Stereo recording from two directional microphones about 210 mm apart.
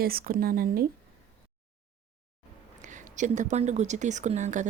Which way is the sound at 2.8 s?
35° right (ahead or behind).